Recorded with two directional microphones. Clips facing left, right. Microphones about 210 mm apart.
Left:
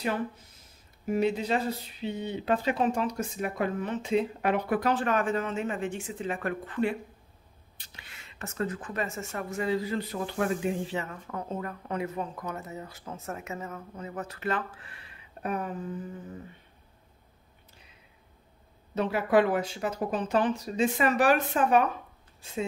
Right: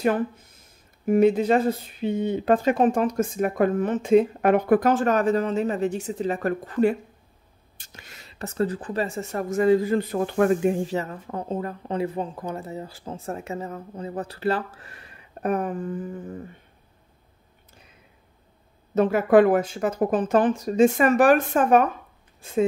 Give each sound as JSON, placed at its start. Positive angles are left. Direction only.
{"t": 0.0, "sound": "speech", "side_deg": -50}
{"t": 18.9, "sound": "speech", "side_deg": -50}